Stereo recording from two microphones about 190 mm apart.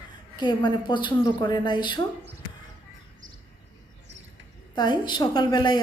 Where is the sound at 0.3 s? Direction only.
25° left (ahead or behind).